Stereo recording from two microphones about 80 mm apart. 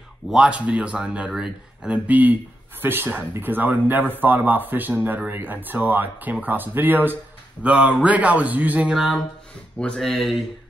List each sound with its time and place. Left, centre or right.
0.3 s a man's voice: centre
2.0 s a man's voice: right
9.8 s speech: centre